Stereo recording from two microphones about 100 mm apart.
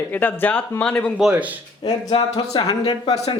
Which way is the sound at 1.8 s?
55° left (ahead or behind).